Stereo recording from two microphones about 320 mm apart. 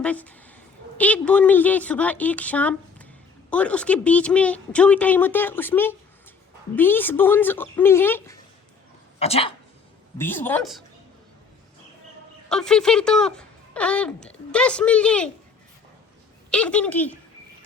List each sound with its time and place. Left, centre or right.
0.0 s a woman's voice: centre
9.1 s speech: centre
10.2 s speech: centre
12.5 s speech: centre
16.5 s speech: centre